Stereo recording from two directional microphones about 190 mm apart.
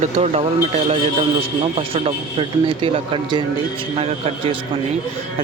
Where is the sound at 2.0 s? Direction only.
30° right (ahead or behind).